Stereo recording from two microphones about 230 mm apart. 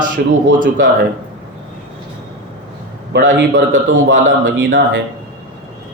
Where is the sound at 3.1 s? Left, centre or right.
Right.